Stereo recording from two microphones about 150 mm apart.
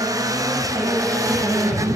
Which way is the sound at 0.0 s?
25° right (ahead or behind).